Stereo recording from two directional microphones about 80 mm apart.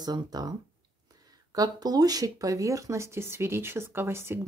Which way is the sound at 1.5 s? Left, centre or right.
Right.